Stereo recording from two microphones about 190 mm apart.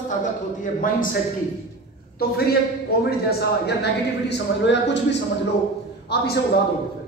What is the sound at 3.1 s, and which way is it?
Speech, 55° left (ahead or behind).